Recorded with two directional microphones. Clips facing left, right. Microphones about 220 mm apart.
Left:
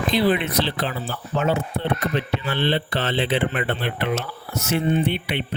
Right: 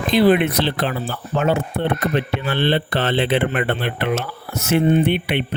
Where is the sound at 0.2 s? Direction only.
55° right (ahead or behind).